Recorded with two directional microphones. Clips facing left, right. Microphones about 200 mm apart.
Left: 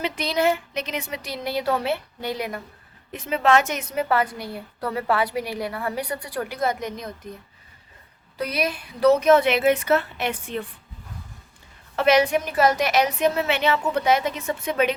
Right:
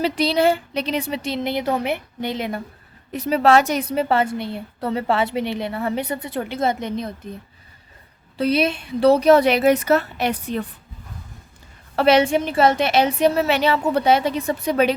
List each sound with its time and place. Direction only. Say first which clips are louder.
0.0 s a woman's voice: right 5 dB; 30° right (ahead or behind)
3.1 s a woman's voice: right 4 dB; 40° right (ahead or behind)
8.4 s a woman's voice: right 7 dB; 25° right (ahead or behind)
11.9 s a woman's voice: right 3 dB; 30° right (ahead or behind)